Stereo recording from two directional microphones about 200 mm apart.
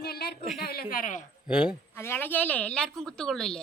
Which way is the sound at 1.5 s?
5° right (ahead or behind).